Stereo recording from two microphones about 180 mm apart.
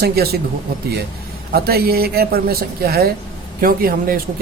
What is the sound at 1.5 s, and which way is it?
Speech, 60° right (ahead or behind).